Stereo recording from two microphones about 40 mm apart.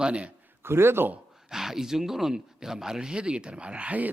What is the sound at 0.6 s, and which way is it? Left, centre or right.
Speech, right.